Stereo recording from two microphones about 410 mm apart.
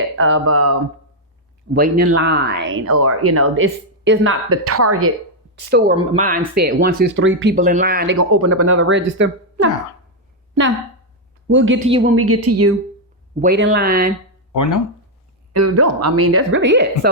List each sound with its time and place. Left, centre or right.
0.2 s speech: right
1.7 s speech: right
5.7 s speech: centre
11.4 s speech: right
11.9 s a woman's voice: centre
12.1 s speech: right
13.4 s speech: right
14.5 s speech: left
15.5 s speech: right